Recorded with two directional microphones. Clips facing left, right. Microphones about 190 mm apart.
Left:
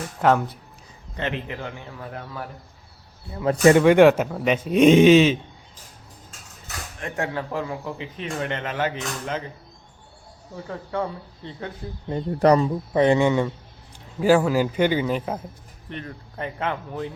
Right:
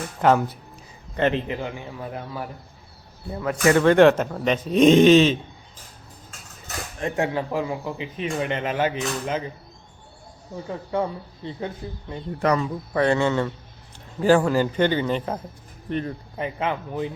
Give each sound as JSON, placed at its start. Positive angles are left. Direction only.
{"t": 0.2, "sound": "speech", "side_deg": 0}
{"t": 1.3, "sound": "a man's voice", "side_deg": -25}
{"t": 1.5, "sound": "speech", "side_deg": -15}
{"t": 3.4, "sound": "speech", "side_deg": 30}
{"t": 3.8, "sound": "speech", "side_deg": 10}
{"t": 7.0, "sound": "speech", "side_deg": -20}
{"t": 10.5, "sound": "speech", "side_deg": -15}
{"t": 12.0, "sound": "speech", "side_deg": 35}
{"t": 12.9, "sound": "speech", "side_deg": 20}
{"t": 15.9, "sound": "speech", "side_deg": -45}
{"t": 16.4, "sound": "speech", "side_deg": -5}